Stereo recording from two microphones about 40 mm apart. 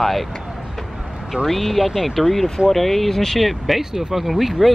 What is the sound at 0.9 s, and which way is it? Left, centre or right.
Vehicle, centre.